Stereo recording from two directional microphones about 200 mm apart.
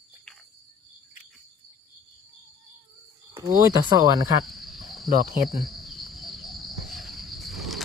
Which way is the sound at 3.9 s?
20° right (ahead or behind).